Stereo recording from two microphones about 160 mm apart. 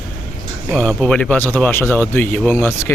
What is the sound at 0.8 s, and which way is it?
Speech, 5° left (ahead or behind).